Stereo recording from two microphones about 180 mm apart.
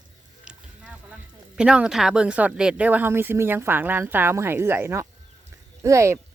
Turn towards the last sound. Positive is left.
turn(degrees=-15)  # may be behind; listen again after turning